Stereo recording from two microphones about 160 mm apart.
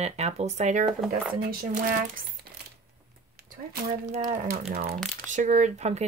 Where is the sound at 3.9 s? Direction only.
40° right (ahead or behind).